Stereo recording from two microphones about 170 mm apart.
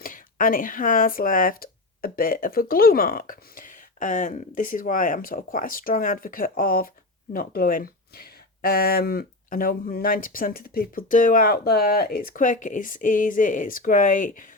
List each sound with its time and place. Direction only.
0.0 s speech: 55° left (ahead or behind)